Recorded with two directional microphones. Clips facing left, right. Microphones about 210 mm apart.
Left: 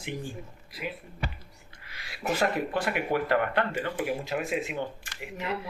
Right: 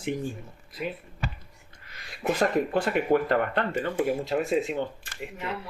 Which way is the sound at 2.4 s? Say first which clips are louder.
Right 4 dB; 40° right (ahead or behind).